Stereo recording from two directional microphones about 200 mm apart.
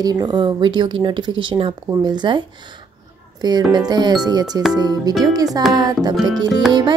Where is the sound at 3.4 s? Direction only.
20° right (ahead or behind).